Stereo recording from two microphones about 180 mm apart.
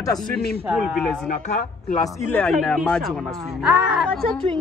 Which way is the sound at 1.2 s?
40° left (ahead or behind).